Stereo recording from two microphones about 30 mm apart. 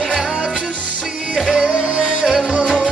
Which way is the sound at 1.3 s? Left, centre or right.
Right.